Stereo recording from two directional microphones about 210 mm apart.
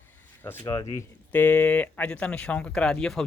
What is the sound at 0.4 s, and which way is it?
Speech, 15° left (ahead or behind).